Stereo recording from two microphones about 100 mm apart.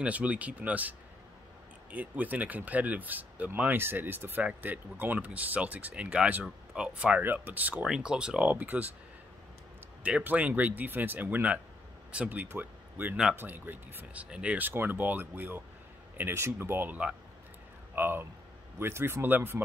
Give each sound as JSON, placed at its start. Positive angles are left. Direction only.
{"t": 0.0, "sound": "speech", "side_deg": -15}
{"t": 7.8, "sound": "speech", "side_deg": -5}
{"t": 10.0, "sound": "speech", "side_deg": -15}